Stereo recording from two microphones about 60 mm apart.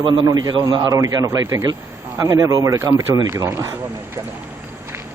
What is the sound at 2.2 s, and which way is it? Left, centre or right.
Speech, right.